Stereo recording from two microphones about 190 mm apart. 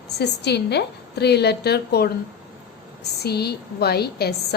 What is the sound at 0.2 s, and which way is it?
A woman's voice, 60° left (ahead or behind).